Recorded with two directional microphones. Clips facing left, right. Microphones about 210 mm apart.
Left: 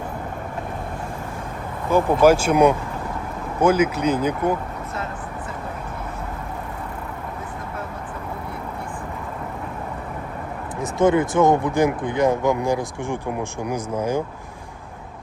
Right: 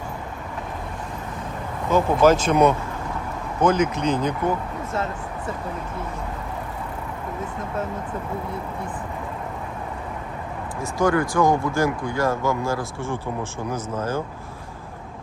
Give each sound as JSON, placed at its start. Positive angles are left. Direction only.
{"t": 1.9, "sound": "speech", "side_deg": 10}
{"t": 10.9, "sound": "speech", "side_deg": 20}